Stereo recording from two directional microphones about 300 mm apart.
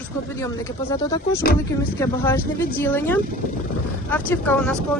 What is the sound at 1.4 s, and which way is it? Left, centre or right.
Speech, left.